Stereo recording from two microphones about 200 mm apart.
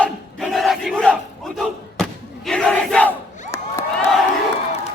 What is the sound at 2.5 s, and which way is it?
Crowd, 5° left (ahead or behind).